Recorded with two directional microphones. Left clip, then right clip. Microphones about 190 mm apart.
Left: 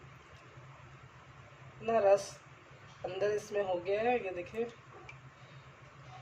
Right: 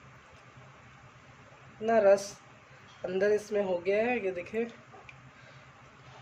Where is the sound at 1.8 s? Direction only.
35° right (ahead or behind).